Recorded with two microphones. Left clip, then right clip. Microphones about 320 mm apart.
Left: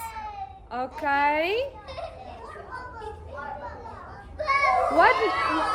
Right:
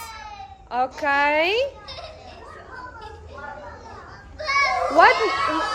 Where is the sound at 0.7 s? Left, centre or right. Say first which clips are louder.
Right 5 dB; right.